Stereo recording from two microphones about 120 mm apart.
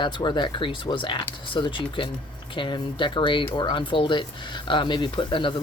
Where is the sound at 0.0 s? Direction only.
40° left (ahead or behind).